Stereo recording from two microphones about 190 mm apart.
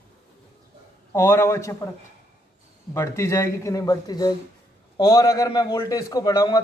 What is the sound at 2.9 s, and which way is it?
A man's voice, 15° left (ahead or behind).